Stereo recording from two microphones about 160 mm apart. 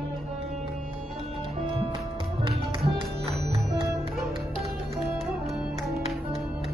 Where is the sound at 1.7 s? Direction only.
30° right (ahead or behind).